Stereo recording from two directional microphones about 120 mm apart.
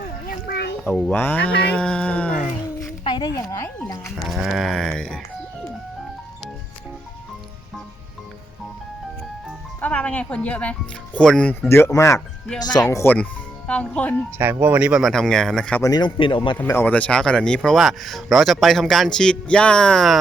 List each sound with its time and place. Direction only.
0.9 s speech: 15° left (ahead or behind)
3.0 s a sound: 40° left (ahead or behind)
3.5 s a man's voice: 20° left (ahead or behind)
4.3 s speech: 5° right (ahead or behind)
9.8 s speech: 10° left (ahead or behind)
11.7 s a man's voice: 25° left (ahead or behind)
13.7 s speech: 10° left (ahead or behind)
14.3 s speech: 20° right (ahead or behind); by 15.8 s 5° left (ahead or behind)
15.8 s a man's voice: 35° left (ahead or behind)
16.8 s speech: 10° left (ahead or behind)